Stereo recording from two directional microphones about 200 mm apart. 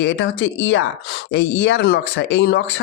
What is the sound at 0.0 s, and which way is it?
Speech, 60° left (ahead or behind).